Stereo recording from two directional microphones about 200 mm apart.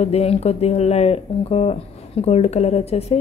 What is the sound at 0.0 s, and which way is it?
Speech, 30° left (ahead or behind).